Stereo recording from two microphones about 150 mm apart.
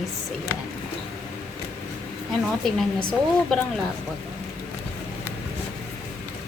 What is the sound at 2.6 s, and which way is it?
Speech, centre (ahead or behind).